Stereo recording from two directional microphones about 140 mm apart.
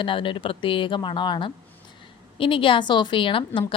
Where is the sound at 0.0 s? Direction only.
35° left (ahead or behind).